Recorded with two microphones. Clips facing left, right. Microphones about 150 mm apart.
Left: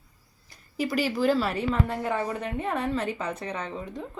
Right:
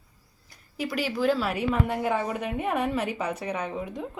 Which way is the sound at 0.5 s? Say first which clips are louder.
Left 3 dB; centre (ahead or behind).